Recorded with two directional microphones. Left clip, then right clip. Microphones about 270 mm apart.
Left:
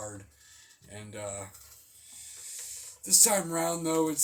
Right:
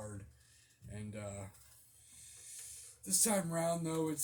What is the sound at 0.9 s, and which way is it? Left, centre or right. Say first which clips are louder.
Speech: left 8 dB; centre.